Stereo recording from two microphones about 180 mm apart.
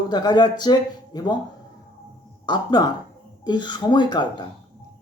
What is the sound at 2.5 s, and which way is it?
Speech, 25° left (ahead or behind).